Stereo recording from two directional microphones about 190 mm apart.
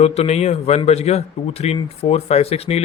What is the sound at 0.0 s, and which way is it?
A man's voice, 35° left (ahead or behind).